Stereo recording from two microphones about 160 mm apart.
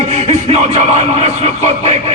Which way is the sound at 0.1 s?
40° right (ahead or behind).